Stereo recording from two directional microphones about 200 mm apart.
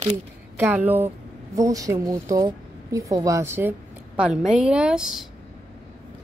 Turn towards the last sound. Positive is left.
turn(degrees=-5)  # may be behind; listen again after turning